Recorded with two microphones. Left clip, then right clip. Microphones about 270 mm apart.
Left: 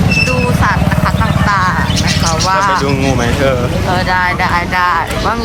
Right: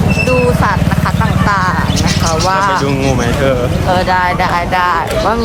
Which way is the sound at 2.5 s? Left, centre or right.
Centre.